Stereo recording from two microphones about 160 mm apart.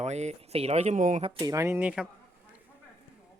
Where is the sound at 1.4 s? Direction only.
20° right (ahead or behind).